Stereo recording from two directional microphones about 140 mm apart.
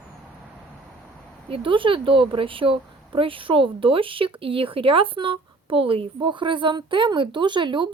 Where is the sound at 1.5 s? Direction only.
40° right (ahead or behind).